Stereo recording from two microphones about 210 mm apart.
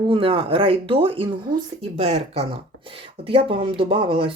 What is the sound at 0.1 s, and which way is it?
Speech, 25° right (ahead or behind).